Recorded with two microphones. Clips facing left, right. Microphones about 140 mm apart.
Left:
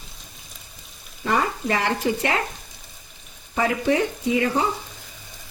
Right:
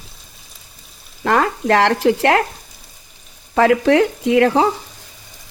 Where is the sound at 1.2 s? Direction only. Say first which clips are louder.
Right 6 dB; 80° right.